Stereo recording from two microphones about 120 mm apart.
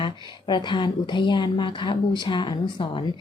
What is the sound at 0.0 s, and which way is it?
A woman's voice, 40° left (ahead or behind).